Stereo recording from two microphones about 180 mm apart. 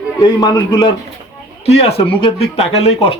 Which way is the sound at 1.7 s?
35° left (ahead or behind).